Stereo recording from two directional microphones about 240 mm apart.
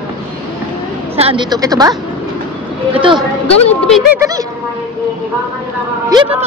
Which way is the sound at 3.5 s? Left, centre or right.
Left.